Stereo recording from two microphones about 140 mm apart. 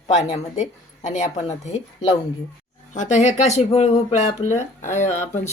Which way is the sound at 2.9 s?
60° left (ahead or behind).